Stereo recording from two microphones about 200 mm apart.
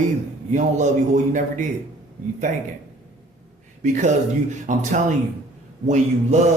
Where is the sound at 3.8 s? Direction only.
40° right (ahead or behind).